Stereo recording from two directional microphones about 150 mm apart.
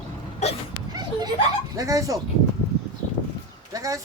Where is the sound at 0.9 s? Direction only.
30° right (ahead or behind).